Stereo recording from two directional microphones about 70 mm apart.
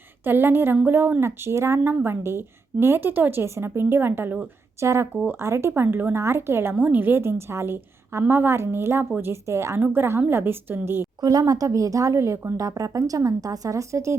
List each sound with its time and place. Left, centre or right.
0.3 s a woman's voice: right
4.8 s a woman's voice: right
5.1 s speech: right
5.4 s a woman's voice: right
11.2 s a woman's voice: right
12.5 s speech: right